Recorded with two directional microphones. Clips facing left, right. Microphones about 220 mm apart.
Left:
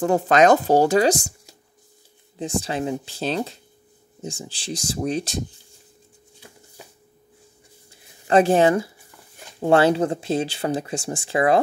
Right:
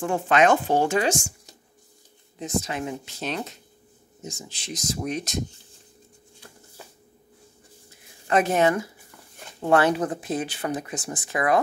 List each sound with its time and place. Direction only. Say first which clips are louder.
0.0 s speech: left 4 dB; 40° left (ahead or behind)
2.3 s speech: left 3 dB; 30° left (ahead or behind)
8.3 s speech: left 5 dB; 30° left (ahead or behind)